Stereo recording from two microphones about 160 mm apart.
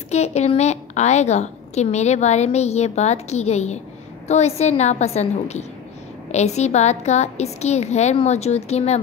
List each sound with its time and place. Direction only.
0.1 s a woman's voice: 45° left (ahead or behind)